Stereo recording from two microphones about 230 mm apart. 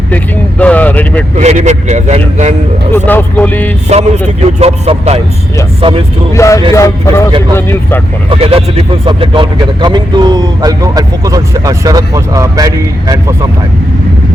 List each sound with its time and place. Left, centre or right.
0.6 s speech: centre
1.4 s a man's voice: right
3.1 s speech: centre
3.8 s speech: right
6.3 s speech: centre
8.3 s speech: right